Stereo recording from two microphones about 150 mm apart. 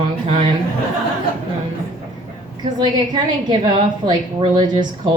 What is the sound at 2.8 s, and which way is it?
A woman's voice, 30° right (ahead or behind).